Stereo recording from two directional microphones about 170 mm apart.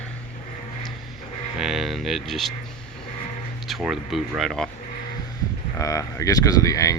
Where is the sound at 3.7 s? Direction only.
Centre (ahead or behind).